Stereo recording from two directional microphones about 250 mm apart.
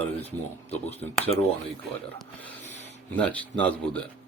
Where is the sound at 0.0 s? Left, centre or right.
Left.